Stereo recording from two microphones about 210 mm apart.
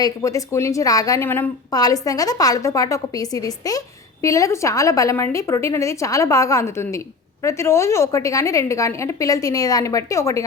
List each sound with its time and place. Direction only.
0.0 s a woman's voice: 15° left (ahead or behind)